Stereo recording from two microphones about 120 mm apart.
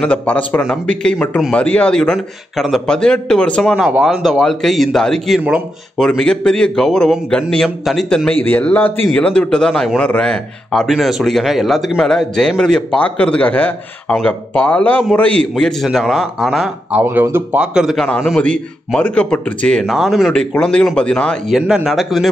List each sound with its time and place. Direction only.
0.0 s a man's voice: 10° left (ahead or behind)
3.7 s a man's voice: 5° right (ahead or behind)
17.0 s a man's voice: 20° right (ahead or behind); by 19.8 s 10° left (ahead or behind)
19.8 s a man's voice: centre (ahead or behind)
21.5 s a man's voice: 5° right (ahead or behind)